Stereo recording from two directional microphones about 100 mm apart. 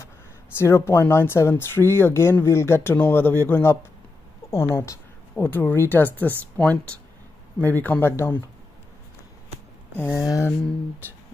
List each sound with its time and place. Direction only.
0.6 s speech: 25° left (ahead or behind)
9.9 s speech: 20° left (ahead or behind)
10.2 s a sound: 35° left (ahead or behind)